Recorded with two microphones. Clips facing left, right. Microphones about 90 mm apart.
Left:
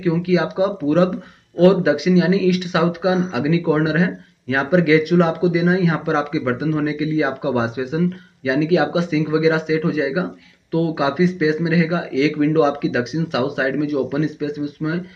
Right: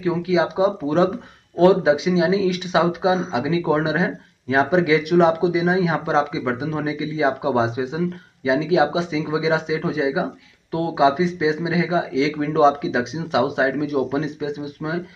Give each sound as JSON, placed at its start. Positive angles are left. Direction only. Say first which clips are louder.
{"t": 0.0, "sound": "speech", "louder": "left 1 dB", "side_deg": -25}